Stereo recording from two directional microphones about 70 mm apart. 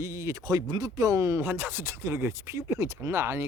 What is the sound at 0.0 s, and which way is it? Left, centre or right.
Speech, right.